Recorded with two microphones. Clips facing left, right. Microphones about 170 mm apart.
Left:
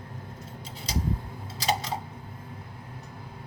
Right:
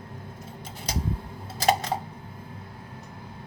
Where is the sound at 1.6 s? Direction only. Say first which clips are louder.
Right 5 dB; 50° right (ahead or behind).